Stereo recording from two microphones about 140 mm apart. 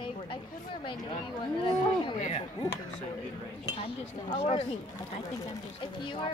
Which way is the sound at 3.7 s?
40° left (ahead or behind).